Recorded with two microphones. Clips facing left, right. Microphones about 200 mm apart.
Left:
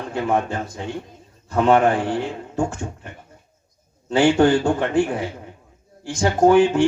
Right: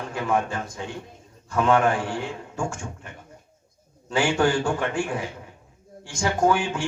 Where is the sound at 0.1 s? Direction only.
35° left (ahead or behind).